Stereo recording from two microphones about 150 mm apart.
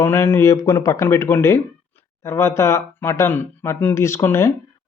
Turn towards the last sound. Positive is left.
turn(degrees=15)  # may be behind; listen again after turning